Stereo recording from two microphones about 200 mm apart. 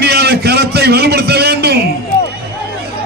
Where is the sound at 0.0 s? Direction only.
55° right (ahead or behind).